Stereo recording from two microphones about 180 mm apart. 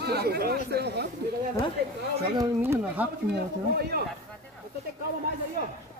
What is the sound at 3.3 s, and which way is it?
Speech, 65° right (ahead or behind).